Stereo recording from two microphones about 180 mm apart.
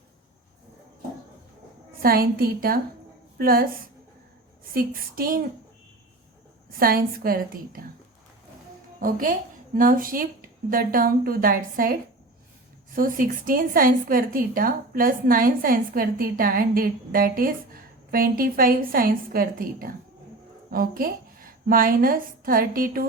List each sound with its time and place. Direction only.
2.0 s a woman's voice: 55° right (ahead or behind)
6.7 s a woman's voice: 55° right (ahead or behind)
9.0 s a woman's voice: 50° right (ahead or behind)